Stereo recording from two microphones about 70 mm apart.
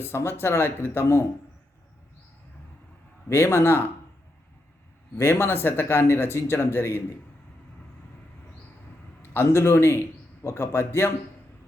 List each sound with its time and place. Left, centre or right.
0.0 s speech: left
3.2 s speech: left
5.1 s speech: left
9.3 s speech: left